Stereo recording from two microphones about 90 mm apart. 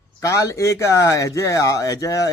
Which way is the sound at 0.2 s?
35° left (ahead or behind).